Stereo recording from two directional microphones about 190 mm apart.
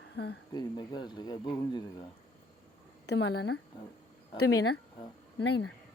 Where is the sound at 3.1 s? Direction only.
60° left (ahead or behind).